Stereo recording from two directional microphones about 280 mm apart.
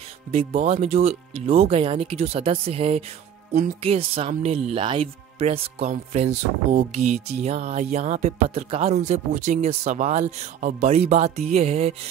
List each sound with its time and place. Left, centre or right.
0.3 s speech: right